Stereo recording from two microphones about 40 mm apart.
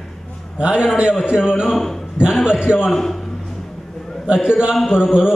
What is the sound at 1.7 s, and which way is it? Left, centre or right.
Speech, centre.